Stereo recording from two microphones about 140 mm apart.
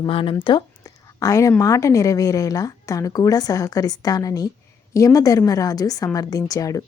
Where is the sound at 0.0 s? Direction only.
40° left (ahead or behind).